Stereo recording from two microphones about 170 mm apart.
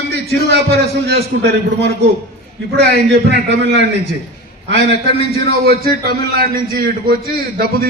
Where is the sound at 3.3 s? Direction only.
75° right (ahead or behind).